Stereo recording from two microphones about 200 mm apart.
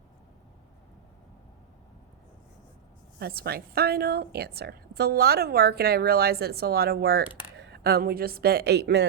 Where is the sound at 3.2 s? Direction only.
50° right (ahead or behind).